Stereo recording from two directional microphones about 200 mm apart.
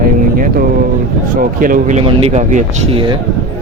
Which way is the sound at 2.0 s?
30° right (ahead or behind).